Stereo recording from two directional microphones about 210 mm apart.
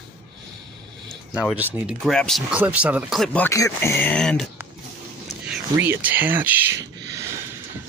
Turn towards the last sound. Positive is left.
turn(degrees=-15)  # may be behind; listen again after turning